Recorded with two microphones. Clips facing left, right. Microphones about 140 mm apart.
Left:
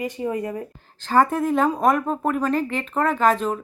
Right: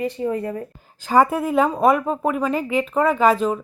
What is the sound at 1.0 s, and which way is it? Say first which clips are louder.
Speech: right 2 dB; 10° right (ahead or behind).